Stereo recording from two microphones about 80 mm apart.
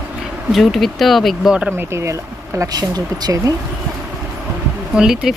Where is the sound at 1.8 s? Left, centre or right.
Right.